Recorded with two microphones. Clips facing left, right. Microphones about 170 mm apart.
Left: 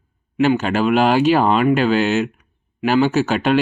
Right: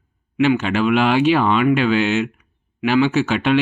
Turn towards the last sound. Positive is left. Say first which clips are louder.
# left 1 dB
turn(degrees=40)  # may be behind; listen again after turning